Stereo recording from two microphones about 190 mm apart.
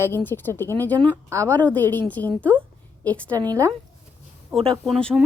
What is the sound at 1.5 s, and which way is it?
A woman's voice, 10° left (ahead or behind).